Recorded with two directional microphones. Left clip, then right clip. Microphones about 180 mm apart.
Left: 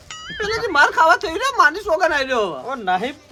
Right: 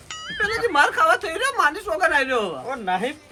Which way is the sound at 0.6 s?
55° left (ahead or behind).